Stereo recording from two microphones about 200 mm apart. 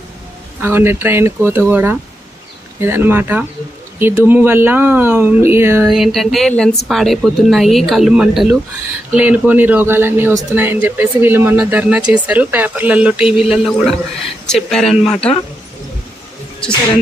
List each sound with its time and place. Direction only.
0.6 s speech: 10° right (ahead or behind)
5.9 s a woman's voice: centre (ahead or behind)